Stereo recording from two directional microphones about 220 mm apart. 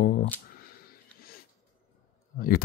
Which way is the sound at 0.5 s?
45° left (ahead or behind).